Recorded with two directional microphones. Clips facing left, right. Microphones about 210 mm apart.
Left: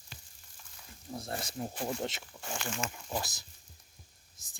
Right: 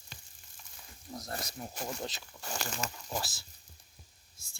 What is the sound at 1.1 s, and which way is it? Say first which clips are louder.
Speech: left 3 dB; 30° left (ahead or behind).